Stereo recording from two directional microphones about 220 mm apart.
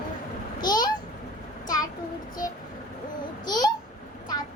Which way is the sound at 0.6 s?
20° left (ahead or behind).